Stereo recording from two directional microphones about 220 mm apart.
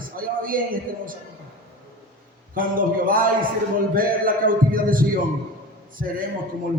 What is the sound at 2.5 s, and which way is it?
A man's voice, 40° right (ahead or behind).